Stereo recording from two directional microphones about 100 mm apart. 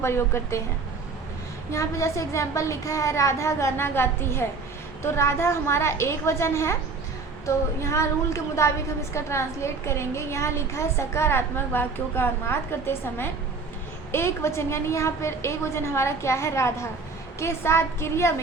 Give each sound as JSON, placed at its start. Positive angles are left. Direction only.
{"t": 0.0, "sound": "a woman's voice", "side_deg": 25}
{"t": 1.7, "sound": "a woman's voice", "side_deg": 30}